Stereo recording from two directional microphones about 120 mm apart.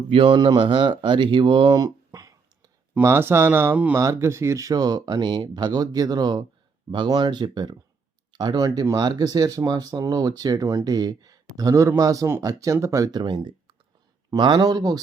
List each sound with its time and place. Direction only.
0.1 s speech: 50° right (ahead or behind)
0.3 s speech: 40° right (ahead or behind)
2.9 s speech: 20° right (ahead or behind)